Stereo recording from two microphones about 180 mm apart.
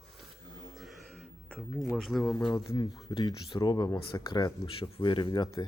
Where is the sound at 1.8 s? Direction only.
Centre (ahead or behind).